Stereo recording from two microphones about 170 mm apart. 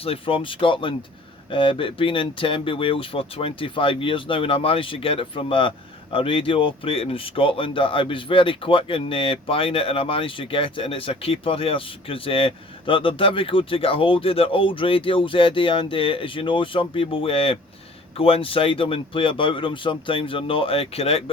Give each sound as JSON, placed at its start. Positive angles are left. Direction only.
{"t": 0.0, "sound": "speech", "side_deg": 35}